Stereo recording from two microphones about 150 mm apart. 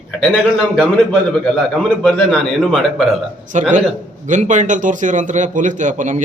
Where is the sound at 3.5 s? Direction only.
55° right (ahead or behind).